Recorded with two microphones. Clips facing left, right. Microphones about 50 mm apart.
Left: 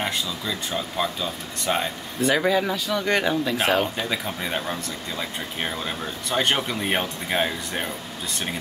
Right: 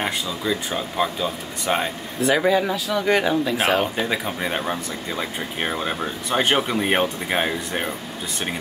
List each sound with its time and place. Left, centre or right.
0.0 s speech: centre
3.8 s speech: centre